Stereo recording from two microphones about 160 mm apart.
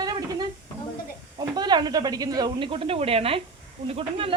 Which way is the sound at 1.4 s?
25° right (ahead or behind).